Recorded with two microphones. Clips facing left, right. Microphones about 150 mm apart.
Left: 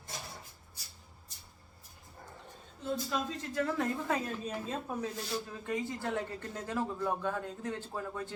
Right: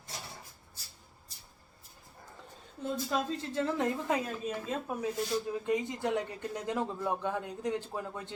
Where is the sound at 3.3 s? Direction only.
30° right (ahead or behind).